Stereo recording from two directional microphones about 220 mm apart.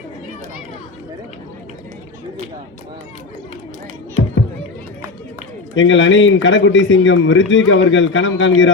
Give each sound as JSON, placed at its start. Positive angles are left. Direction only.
{"t": 5.7, "sound": "a man's voice", "side_deg": 55}